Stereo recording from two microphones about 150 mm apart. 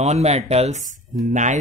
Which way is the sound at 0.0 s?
45° right (ahead or behind).